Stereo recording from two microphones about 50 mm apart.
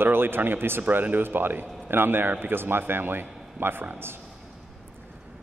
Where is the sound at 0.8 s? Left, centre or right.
Right.